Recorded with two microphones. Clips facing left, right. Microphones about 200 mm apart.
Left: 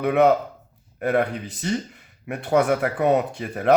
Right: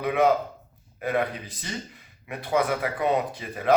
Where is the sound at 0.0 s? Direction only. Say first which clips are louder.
Left 4 dB; 55° left (ahead or behind).